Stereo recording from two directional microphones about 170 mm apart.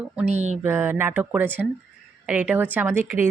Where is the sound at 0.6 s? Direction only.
15° right (ahead or behind).